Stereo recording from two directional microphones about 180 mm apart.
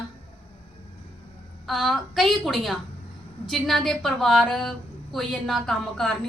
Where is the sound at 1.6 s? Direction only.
Centre (ahead or behind).